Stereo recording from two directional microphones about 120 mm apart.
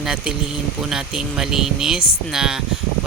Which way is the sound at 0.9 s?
5° right (ahead or behind).